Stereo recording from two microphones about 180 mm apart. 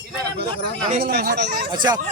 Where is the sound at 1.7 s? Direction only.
20° right (ahead or behind).